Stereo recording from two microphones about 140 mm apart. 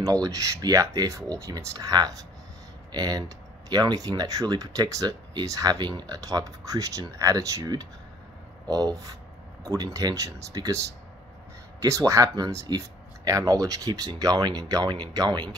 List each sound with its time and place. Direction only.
0.0 s speech: 25° right (ahead or behind)